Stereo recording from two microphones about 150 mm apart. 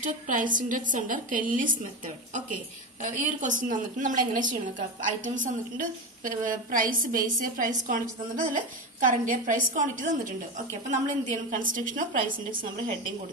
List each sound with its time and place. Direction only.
0.0 s a woman's voice: 60° right (ahead or behind)
9.0 s a woman's voice: 60° right (ahead or behind)